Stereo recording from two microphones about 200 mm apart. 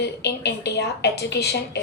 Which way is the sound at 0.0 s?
55° left (ahead or behind).